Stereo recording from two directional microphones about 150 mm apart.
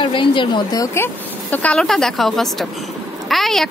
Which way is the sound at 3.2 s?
Centre (ahead or behind).